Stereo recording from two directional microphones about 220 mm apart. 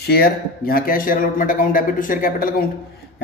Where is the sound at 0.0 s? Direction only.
45° left (ahead or behind).